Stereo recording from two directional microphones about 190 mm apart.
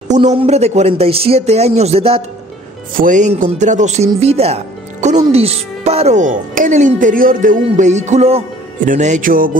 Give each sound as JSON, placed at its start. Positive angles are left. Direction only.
{"t": 0.1, "sound": "speech", "side_deg": -35}
{"t": 3.0, "sound": "speech", "side_deg": -40}